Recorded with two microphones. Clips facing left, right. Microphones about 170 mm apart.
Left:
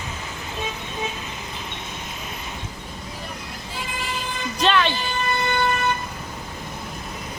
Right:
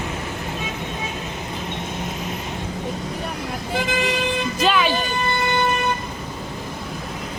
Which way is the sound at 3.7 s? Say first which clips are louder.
Right 10 dB; 90° right.